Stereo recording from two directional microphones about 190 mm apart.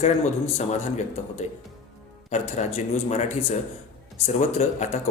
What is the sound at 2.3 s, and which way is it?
A man's voice, 35° left (ahead or behind).